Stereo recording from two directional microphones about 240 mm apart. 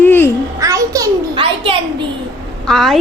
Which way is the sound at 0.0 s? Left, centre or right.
Centre.